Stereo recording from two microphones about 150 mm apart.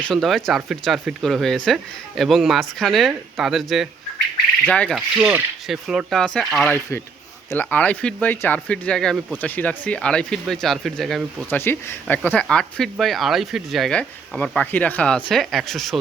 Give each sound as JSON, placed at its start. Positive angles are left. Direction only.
{"t": 0.0, "sound": "speech", "side_deg": 0}
{"t": 4.9, "sound": "speech", "side_deg": -5}
{"t": 11.5, "sound": "speech", "side_deg": 15}